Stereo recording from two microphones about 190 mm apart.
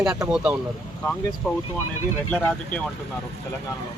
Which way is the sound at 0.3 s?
5° right (ahead or behind).